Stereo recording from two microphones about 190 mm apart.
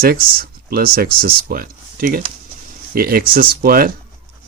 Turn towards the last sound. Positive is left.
turn(degrees=-50)  # may be behind; listen again after turning